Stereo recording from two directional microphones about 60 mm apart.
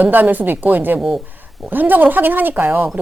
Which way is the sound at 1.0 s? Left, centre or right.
Centre.